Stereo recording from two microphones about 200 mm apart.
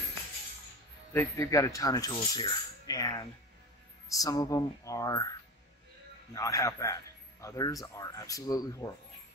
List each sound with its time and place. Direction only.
1.1 s a man's voice: 15° left (ahead or behind)
6.3 s a man's voice: 15° left (ahead or behind)